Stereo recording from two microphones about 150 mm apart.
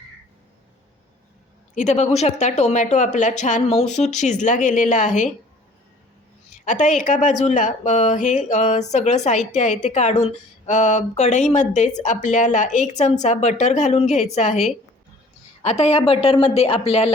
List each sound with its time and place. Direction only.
1.7 s speech: 50° left (ahead or behind)
6.7 s speech: 55° left (ahead or behind)